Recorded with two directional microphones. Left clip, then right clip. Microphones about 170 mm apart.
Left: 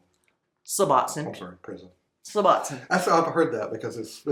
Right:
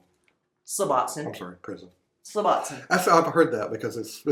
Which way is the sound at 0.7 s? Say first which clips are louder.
Left 3 dB; 35° left (ahead or behind).